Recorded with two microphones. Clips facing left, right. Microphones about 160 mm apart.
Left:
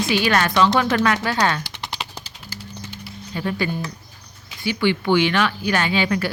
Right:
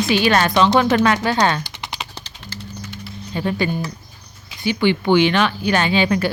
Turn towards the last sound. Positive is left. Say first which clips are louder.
# right 3 dB
turn(degrees=-25)  # may be behind; listen again after turning